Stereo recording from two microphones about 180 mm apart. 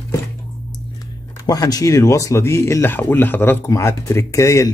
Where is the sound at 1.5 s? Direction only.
20° left (ahead or behind).